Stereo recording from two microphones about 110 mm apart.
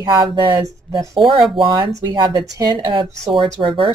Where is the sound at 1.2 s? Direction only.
55° right (ahead or behind).